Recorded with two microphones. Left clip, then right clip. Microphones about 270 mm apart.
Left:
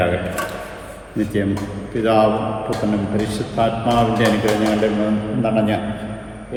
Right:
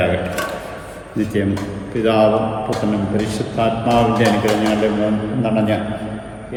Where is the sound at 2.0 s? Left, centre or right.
Centre.